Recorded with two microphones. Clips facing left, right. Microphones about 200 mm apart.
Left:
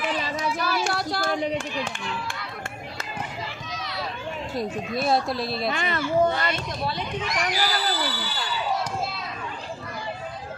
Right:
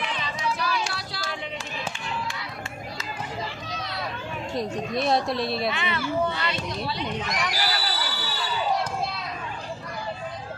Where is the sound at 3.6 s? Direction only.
35° right (ahead or behind).